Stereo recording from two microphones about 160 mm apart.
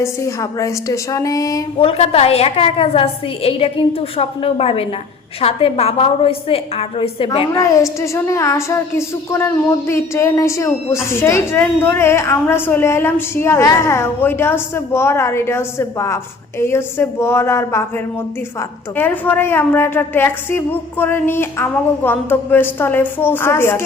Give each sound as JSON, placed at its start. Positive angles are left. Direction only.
{"t": 0.0, "sound": "a woman's voice", "side_deg": 20}
{"t": 1.8, "sound": "a woman's voice", "side_deg": 40}
{"t": 7.6, "sound": "a woman's voice", "side_deg": 20}